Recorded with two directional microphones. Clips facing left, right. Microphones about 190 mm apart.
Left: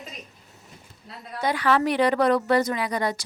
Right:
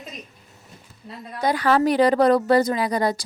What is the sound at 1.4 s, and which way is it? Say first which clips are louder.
A woman's voice: right 3 dB; 40° right (ahead or behind).